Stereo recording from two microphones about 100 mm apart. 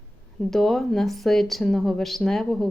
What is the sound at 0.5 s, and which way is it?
A woman's voice, centre (ahead or behind).